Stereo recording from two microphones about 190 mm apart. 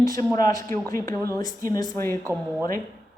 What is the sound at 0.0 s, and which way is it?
A woman's voice, 15° left (ahead or behind).